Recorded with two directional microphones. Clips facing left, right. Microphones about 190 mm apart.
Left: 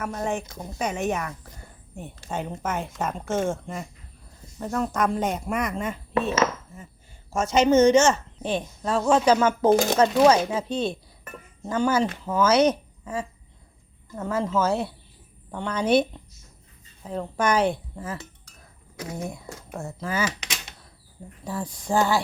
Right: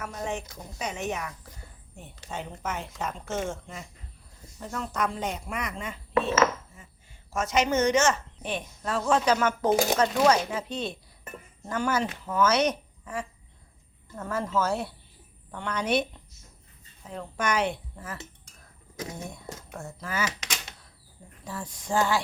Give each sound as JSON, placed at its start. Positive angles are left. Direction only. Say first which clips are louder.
{"t": 0.0, "sound": "a woman's voice", "louder": "left 5 dB", "side_deg": 50}
{"t": 7.3, "sound": "a woman's voice", "louder": "left 7 dB", "side_deg": 30}
{"t": 19.3, "sound": "a woman's voice", "louder": "left 3 dB", "side_deg": 25}
{"t": 21.4, "sound": "a woman's voice", "louder": "left 6 dB", "side_deg": 35}